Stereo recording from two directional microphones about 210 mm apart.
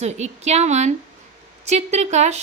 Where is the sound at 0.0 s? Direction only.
30° right (ahead or behind).